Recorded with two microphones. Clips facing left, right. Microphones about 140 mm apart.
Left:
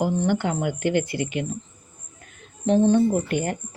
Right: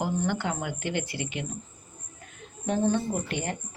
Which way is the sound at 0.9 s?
40° left (ahead or behind).